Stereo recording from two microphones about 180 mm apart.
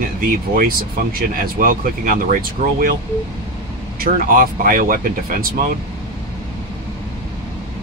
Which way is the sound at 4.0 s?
50° right (ahead or behind).